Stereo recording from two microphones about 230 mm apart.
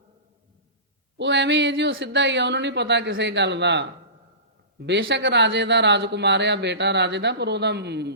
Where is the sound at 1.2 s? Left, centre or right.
Right.